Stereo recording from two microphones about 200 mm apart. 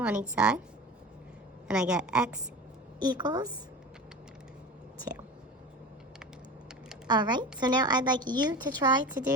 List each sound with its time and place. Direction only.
0.0 s a woman's voice: 5° right (ahead or behind)
1.6 s a woman's voice: 5° right (ahead or behind)
3.0 s a woman's voice: 20° right (ahead or behind)
7.1 s a woman's voice: 20° right (ahead or behind)